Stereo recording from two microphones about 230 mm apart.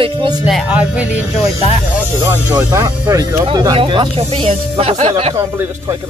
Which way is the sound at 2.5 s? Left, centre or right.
Centre.